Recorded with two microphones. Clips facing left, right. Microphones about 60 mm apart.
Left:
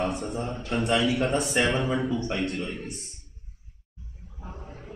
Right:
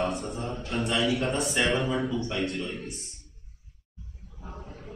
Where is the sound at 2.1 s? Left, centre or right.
Left.